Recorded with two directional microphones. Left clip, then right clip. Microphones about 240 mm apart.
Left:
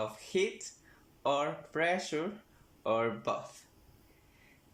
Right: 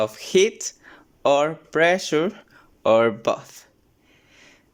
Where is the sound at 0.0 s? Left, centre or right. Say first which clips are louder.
Right 14 dB; right.